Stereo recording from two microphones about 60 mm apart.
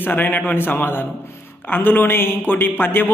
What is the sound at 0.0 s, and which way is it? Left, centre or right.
A man's voice, left.